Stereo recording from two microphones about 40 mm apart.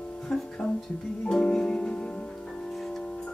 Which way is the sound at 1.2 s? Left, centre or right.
Centre.